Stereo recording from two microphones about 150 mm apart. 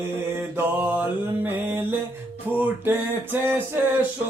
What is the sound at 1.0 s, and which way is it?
Music, 15° right (ahead or behind).